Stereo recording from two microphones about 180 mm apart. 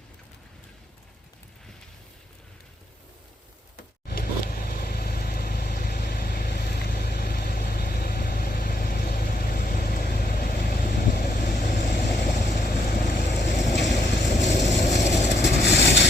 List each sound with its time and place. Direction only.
4.0 s vehicle: 55° left (ahead or behind)
11.2 s vehicle: 45° left (ahead or behind)
12.5 s vehicle: 50° left (ahead or behind)
13.7 s vehicle: 70° left (ahead or behind)
14.3 s vehicle: 40° left (ahead or behind)